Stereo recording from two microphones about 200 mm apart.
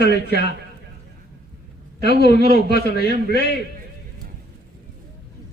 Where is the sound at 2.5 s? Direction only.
55° left (ahead or behind).